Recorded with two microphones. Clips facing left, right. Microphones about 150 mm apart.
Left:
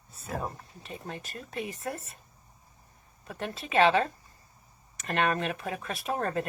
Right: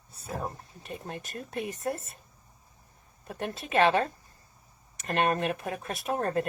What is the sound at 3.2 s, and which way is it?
A woman's voice, 50° right (ahead or behind).